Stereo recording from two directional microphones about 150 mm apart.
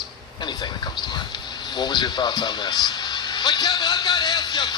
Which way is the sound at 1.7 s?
30° left (ahead or behind).